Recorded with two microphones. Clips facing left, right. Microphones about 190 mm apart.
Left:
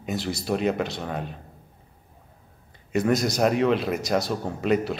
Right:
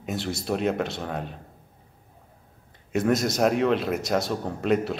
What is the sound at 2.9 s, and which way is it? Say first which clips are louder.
Speech: even; centre (ahead or behind).